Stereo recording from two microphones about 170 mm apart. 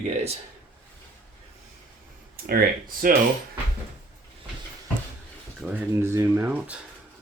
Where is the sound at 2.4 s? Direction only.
65° right (ahead or behind).